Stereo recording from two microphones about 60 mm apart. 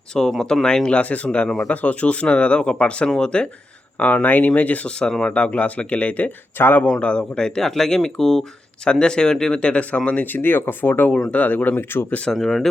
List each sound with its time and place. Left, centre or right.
0.1 s speech: centre
1.6 s speech: left
4.9 s speech: centre
6.6 s speech: left
6.8 s speech: centre
10.3 s speech: left
11.1 s speech: centre
12.3 s speech: centre